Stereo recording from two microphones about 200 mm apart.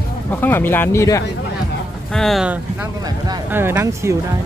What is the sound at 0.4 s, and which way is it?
Speech, 10° left (ahead or behind).